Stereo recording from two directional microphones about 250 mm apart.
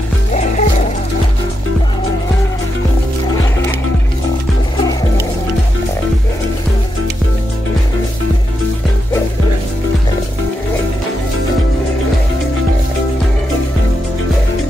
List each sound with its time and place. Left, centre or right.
0.3 s music: left